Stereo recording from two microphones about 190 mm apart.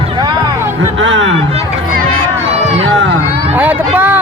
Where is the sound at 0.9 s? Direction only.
80° right.